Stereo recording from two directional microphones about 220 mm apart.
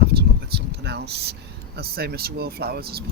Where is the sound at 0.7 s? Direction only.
50° right (ahead or behind).